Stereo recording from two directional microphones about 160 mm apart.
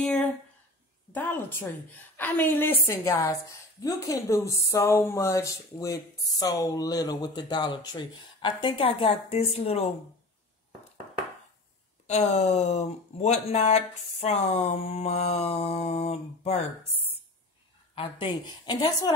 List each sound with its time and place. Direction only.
0.0 s a sound: 5° left (ahead or behind)
1.1 s a woman's voice: 10° left (ahead or behind); by 9.8 s 40° left (ahead or behind)
12.1 s speech: 45° left (ahead or behind)
17.9 s speech: 30° left (ahead or behind)